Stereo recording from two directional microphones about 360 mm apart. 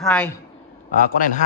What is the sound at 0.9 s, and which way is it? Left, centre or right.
Speech, left.